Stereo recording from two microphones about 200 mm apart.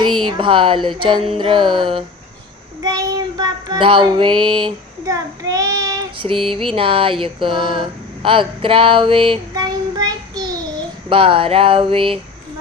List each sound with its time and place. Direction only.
0.3 s music: 25° right (ahead or behind)
2.8 s child singing: 20° right (ahead or behind)
6.5 s a sound: 25° right (ahead or behind)
11.1 s music: 25° right (ahead or behind)